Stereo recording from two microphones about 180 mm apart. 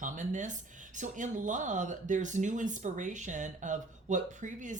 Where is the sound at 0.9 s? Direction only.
45° right (ahead or behind).